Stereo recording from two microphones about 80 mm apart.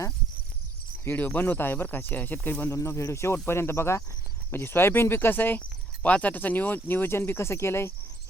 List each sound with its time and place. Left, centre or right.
1.0 s speech: left
2.7 s speech: left